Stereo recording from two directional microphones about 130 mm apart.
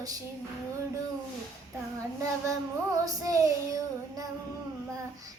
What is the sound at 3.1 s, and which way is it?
Child singing, 25° right (ahead or behind).